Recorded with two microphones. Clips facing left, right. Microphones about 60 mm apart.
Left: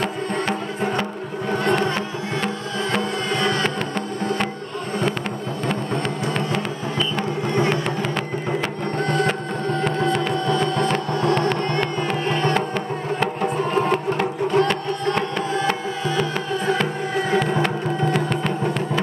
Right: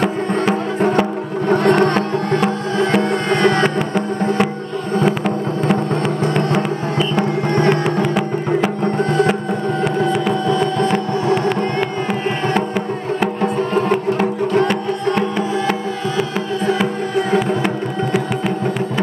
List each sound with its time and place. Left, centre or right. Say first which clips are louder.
1.5 s music: right 7 dB; right
3.6 s music: right 6 dB; centre
6.3 s music: right 6 dB; centre
7.4 s music: right 4 dB; right
7.7 s music: right 6 dB; centre
13.7 s music: right 4 dB; centre